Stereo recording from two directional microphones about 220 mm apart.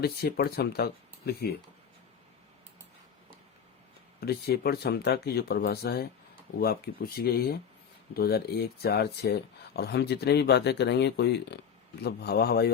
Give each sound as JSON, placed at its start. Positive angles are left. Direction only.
{"t": 0.0, "sound": "speech", "side_deg": 45}
{"t": 4.2, "sound": "speech", "side_deg": 45}